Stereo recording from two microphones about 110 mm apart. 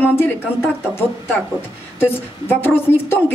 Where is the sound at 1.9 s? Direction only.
20° left (ahead or behind).